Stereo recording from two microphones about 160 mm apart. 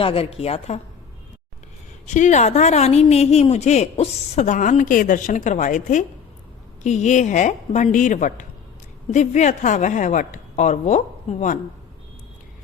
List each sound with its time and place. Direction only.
0.0 s a woman's voice: 35° left (ahead or behind)
2.0 s a woman's voice: 50° left (ahead or behind)